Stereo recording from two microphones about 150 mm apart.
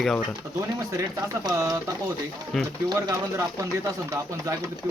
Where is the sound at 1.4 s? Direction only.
20° right (ahead or behind).